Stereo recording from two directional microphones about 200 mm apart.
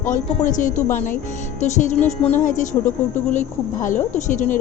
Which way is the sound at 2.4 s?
40° left (ahead or behind).